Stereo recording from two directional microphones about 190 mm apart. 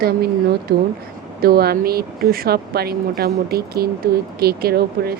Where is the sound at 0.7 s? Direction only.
55° right (ahead or behind).